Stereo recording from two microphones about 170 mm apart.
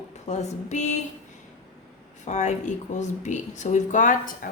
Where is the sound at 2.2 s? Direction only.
45° left (ahead or behind).